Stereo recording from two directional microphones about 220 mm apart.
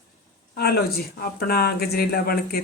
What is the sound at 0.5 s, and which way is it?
Speech, 45° left (ahead or behind).